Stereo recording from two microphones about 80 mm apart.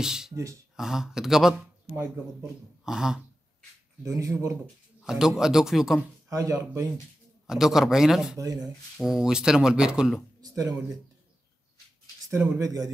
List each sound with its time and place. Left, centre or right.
0.0 s speech: centre
2.8 s dog: centre
4.0 s speech: right
5.0 s speech: centre
6.2 s speech: right
7.4 s speech: centre
10.4 s a sound: right
12.5 s a man's voice: right